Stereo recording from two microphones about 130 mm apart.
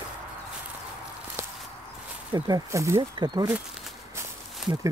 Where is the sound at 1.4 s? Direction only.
20° right (ahead or behind).